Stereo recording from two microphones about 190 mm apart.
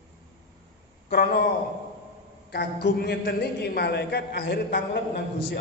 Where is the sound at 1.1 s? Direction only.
55° left (ahead or behind).